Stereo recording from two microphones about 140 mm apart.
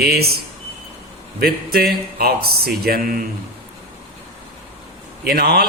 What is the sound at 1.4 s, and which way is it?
A man's voice, 90° right.